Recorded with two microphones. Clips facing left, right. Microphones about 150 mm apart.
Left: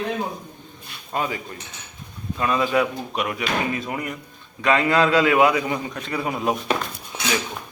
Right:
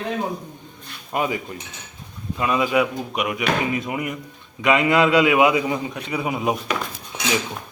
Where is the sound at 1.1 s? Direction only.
15° right (ahead or behind).